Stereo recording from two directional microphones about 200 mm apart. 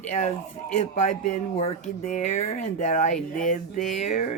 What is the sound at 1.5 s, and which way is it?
Speech, 35° left (ahead or behind).